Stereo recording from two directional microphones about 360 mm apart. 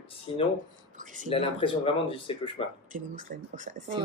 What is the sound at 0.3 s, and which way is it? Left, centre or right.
Speech, centre.